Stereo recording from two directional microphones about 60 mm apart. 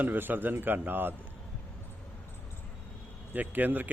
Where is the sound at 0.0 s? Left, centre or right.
Right.